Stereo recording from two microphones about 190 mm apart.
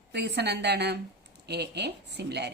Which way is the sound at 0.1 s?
60° right (ahead or behind).